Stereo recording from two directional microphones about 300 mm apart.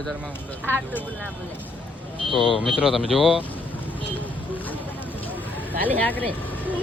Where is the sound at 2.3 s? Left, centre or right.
Centre.